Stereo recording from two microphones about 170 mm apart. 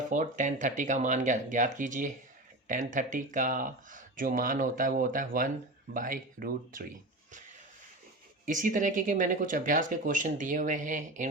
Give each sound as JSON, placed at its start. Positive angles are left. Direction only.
{"t": 0.1, "sound": "speech", "side_deg": -45}
{"t": 8.4, "sound": "speech", "side_deg": -50}